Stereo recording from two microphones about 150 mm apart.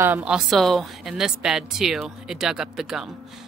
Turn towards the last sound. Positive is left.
turn(degrees=-5)  # may be behind; listen again after turning